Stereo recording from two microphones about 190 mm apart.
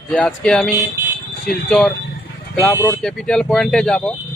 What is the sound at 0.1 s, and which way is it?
Speech, 5° left (ahead or behind).